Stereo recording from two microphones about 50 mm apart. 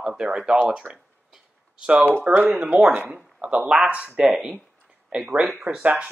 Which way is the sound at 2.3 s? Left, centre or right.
Right.